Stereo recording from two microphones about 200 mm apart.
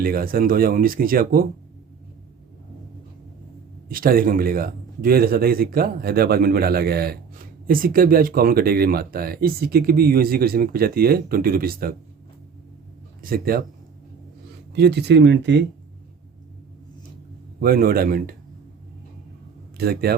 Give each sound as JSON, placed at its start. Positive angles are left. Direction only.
{"t": 0.0, "sound": "speech", "side_deg": -45}
{"t": 3.8, "sound": "speech", "side_deg": -45}
{"t": 13.2, "sound": "speech", "side_deg": -45}
{"t": 14.7, "sound": "speech", "side_deg": -55}
{"t": 17.6, "sound": "speech", "side_deg": -50}
{"t": 19.7, "sound": "a man's voice", "side_deg": -50}